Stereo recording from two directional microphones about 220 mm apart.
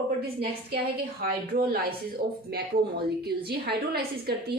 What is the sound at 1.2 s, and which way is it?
Speech, 40° right (ahead or behind).